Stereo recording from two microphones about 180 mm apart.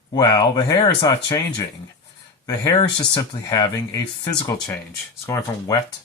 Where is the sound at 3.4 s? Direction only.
20° left (ahead or behind).